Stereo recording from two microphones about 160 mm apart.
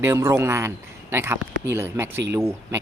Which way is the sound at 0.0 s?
15° right (ahead or behind).